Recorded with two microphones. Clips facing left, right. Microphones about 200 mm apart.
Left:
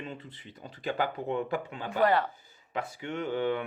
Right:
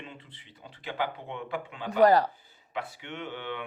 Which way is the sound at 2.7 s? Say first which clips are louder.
Left 3 dB; 40° left (ahead or behind).